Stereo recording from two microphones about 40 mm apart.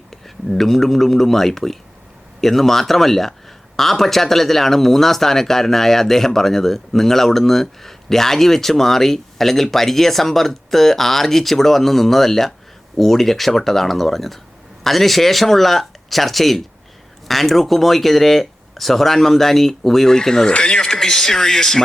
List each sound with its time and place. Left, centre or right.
0.1 s speech: centre